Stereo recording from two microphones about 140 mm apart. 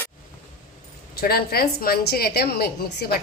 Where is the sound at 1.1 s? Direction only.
90° left.